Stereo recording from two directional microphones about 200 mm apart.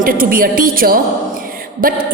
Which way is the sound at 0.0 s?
45° right (ahead or behind).